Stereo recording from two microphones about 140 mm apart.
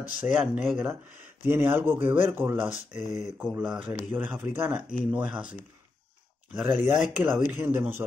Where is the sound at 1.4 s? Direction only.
15° right (ahead or behind).